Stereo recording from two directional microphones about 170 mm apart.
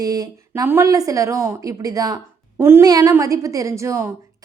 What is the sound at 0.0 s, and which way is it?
Speech, 20° right (ahead or behind).